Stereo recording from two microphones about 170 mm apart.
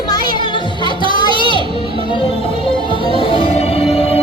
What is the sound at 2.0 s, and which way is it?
Music, 30° left (ahead or behind).